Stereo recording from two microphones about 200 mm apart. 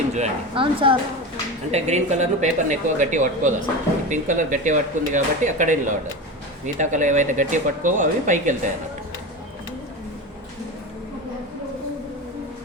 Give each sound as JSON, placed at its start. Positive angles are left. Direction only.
{"t": 0.1, "sound": "speech", "side_deg": -30}